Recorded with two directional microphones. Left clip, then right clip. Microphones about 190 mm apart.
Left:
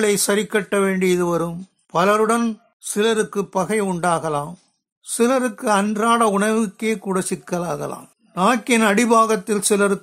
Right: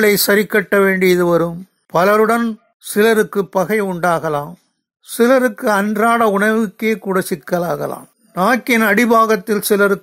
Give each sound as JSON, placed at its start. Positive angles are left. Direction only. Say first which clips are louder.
{"t": 0.0, "sound": "speech", "louder": "right 6 dB", "side_deg": -25}
{"t": 3.0, "sound": "speech", "louder": "right 6 dB", "side_deg": -30}